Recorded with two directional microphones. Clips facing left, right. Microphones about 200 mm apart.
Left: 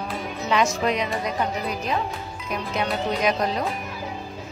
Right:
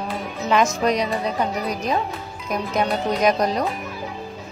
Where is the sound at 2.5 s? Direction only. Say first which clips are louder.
Right 4 dB; 45° right (ahead or behind).